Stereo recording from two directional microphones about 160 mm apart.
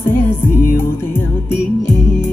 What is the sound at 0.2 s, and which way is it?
Music, 15° left (ahead or behind).